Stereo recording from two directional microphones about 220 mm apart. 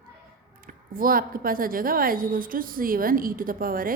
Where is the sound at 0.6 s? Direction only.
40° right (ahead or behind).